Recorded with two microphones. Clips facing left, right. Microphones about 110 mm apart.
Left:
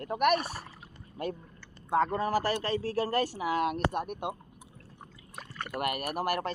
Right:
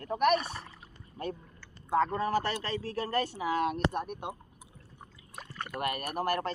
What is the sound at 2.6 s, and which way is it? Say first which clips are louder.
Speech: left 4 dB; 30° left (ahead or behind).